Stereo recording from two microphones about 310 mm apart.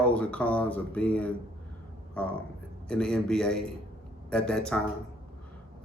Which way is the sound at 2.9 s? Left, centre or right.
Centre.